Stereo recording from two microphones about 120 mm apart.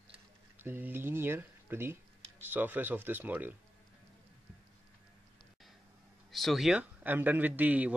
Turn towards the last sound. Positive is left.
turn(degrees=-15)  # may be behind; listen again after turning